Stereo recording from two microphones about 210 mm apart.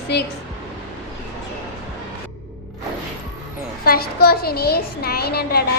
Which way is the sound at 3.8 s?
45° left (ahead or behind).